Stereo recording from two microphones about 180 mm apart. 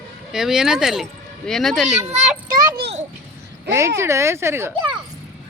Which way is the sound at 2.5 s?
50° right (ahead or behind).